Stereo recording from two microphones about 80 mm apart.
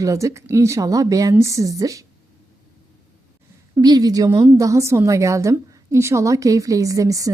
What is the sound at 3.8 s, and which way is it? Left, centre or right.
A woman's voice, right.